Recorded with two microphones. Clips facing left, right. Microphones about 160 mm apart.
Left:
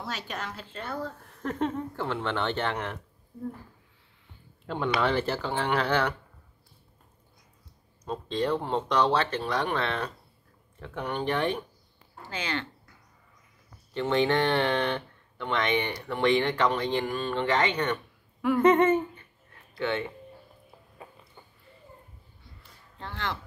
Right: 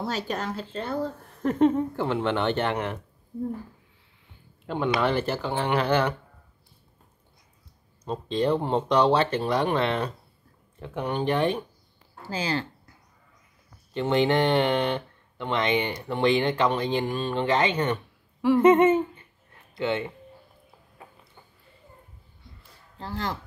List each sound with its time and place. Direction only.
0.0 s speech: 35° right (ahead or behind)
1.4 s speech: 15° right (ahead or behind)
4.6 s speech: 10° right (ahead or behind)
8.0 s speech: 20° right (ahead or behind)
11.2 s speech: 10° right (ahead or behind)
12.3 s speech: 35° right (ahead or behind)
13.9 s speech: 20° right (ahead or behind)
22.9 s speech: 35° right (ahead or behind)